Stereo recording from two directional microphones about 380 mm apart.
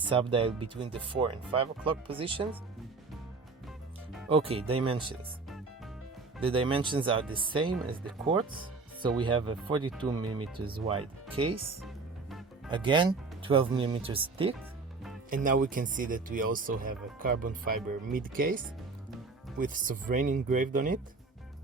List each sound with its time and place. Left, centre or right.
0.0 s speech: centre
4.3 s speech: centre
6.4 s speech: centre
12.7 s speech: centre